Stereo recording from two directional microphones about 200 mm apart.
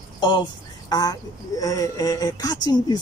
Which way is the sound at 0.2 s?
20° left (ahead or behind).